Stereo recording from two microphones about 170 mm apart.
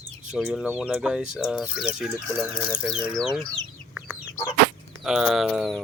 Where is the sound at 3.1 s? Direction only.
Centre (ahead or behind).